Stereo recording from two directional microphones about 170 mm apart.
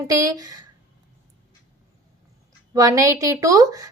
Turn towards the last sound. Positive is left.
turn(degrees=-20)  # may be behind; listen again after turning